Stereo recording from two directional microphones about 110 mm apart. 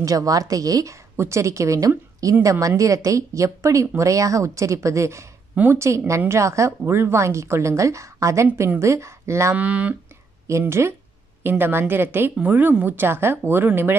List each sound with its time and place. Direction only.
0.0 s a woman's voice: 30° right (ahead or behind)
9.6 s speech: 15° right (ahead or behind)
10.7 s speech: 25° right (ahead or behind)